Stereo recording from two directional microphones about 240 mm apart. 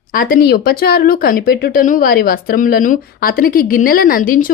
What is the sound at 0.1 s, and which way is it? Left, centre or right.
Speech, left.